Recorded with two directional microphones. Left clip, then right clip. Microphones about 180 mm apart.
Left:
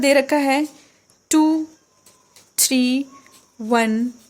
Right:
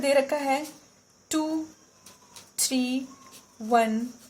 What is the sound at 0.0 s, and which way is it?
A woman's voice, 55° left (ahead or behind).